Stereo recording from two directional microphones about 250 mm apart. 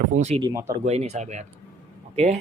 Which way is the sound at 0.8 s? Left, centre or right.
Right.